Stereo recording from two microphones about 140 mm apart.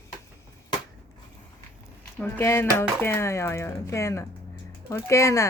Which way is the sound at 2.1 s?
10° left (ahead or behind).